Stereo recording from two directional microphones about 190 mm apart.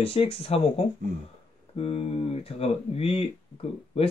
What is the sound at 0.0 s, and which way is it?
Speech, 30° left (ahead or behind).